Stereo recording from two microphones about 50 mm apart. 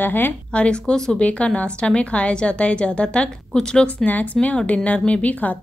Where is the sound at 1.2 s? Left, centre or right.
Left.